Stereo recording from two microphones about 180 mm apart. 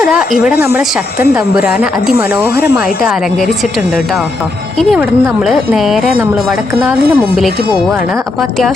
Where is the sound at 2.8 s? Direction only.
55° left (ahead or behind).